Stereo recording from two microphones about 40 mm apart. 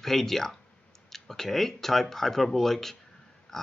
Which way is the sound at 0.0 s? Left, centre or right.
Centre.